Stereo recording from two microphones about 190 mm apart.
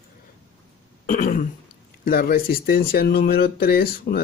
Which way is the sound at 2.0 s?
50° left (ahead or behind).